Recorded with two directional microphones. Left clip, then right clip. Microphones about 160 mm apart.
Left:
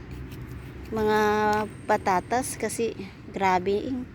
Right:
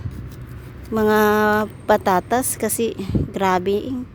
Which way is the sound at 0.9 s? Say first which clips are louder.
Right 6 dB; 50° right (ahead or behind).